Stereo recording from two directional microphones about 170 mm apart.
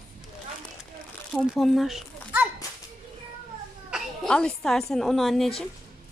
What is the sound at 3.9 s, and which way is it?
A woman's voice, 5° left (ahead or behind).